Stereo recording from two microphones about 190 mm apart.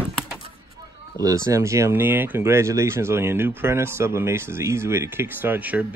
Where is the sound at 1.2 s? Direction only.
15° right (ahead or behind).